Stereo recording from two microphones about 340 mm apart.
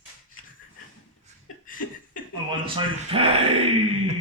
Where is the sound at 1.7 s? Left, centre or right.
Left.